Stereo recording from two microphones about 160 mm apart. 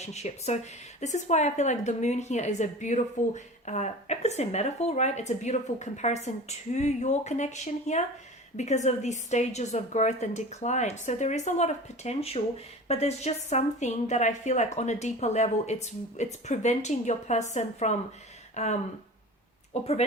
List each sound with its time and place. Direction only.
0.0 s a woman's voice: 45° left (ahead or behind)